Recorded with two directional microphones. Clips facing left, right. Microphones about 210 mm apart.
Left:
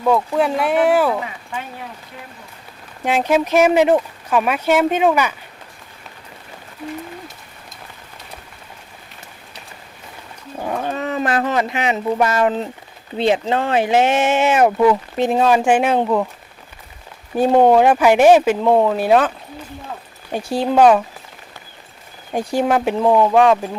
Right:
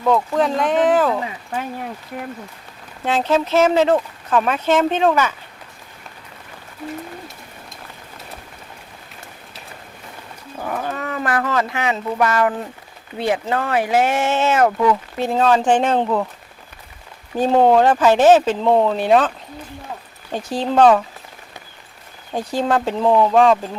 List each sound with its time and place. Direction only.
0.0 s speech: 10° left (ahead or behind)
2.1 s speech: 50° right (ahead or behind)
3.0 s speech: 15° left (ahead or behind)
10.6 s speech: 25° left (ahead or behind)
17.3 s speech: 10° left (ahead or behind)
20.3 s speech: 10° left (ahead or behind)
22.3 s speech: 10° left (ahead or behind)